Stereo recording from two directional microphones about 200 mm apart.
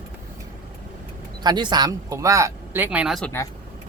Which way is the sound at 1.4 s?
20° right (ahead or behind).